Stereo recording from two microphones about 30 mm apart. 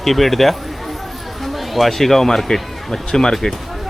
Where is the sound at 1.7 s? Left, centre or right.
Centre; by 3.3 s left.